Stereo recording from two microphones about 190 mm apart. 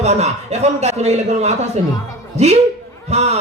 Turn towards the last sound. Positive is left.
turn(degrees=-35)  # may be behind; listen again after turning